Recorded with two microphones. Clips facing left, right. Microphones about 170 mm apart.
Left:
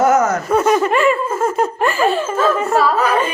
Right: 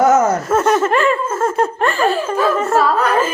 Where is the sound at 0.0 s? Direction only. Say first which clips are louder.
Right 1 dB; 25° right (ahead or behind).